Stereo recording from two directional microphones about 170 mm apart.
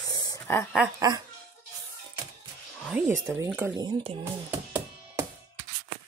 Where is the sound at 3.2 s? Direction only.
15° right (ahead or behind).